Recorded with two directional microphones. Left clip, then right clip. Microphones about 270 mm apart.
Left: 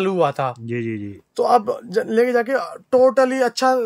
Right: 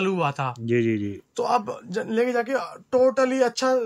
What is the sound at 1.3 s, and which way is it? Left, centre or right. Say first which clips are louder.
Speech: left 7 dB; left.